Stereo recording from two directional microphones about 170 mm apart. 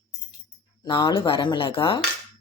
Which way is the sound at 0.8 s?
25° left (ahead or behind).